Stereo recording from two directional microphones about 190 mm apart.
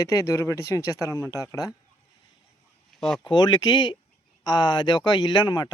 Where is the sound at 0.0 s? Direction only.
15° left (ahead or behind).